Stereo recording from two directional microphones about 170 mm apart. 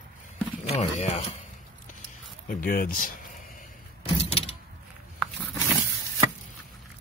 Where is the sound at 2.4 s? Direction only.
55° left (ahead or behind).